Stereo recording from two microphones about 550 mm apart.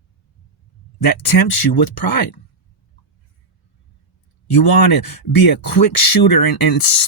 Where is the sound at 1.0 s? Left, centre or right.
Left.